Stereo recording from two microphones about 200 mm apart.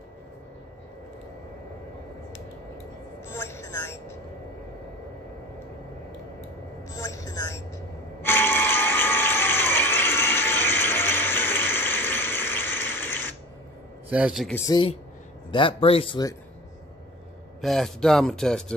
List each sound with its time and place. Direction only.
3.3 s vehicle: 10° left (ahead or behind)
6.9 s music: 15° left (ahead or behind)
8.2 s a sound: 10° left (ahead or behind)
14.0 s a man's voice: 5° right (ahead or behind)
14.5 s speech: 20° left (ahead or behind)
17.6 s speech: centre (ahead or behind)